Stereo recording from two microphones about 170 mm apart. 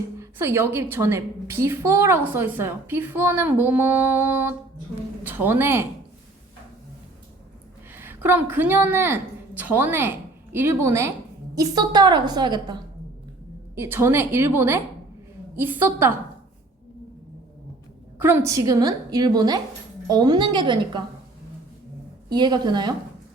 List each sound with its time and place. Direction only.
0.2 s a woman's voice: 15° right (ahead or behind)
7.9 s a woman's voice: 10° right (ahead or behind)
13.7 s a woman's voice: 15° right (ahead or behind)
18.2 s a woman's voice: 15° right (ahead or behind)
22.3 s a woman's voice: 25° right (ahead or behind)